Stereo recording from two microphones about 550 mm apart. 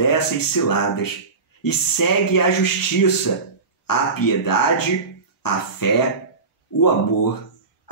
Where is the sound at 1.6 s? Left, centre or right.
Left.